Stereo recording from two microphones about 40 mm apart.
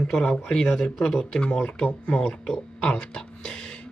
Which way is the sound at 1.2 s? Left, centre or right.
Left.